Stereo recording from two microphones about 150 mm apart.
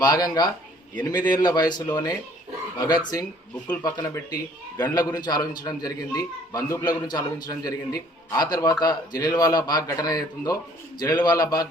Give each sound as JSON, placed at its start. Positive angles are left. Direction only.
{"t": 0.0, "sound": "a man's voice", "side_deg": 25}